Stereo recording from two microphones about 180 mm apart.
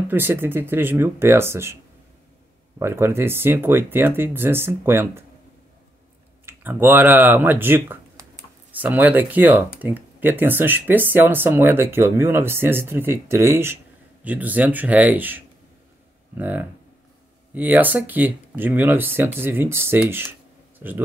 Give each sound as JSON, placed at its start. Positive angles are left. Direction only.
{"t": 0.1, "sound": "speech", "side_deg": -10}
{"t": 2.8, "sound": "speech", "side_deg": -15}
{"t": 6.4, "sound": "speech", "side_deg": -10}